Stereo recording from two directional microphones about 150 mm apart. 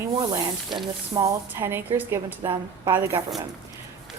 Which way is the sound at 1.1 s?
20° right (ahead or behind).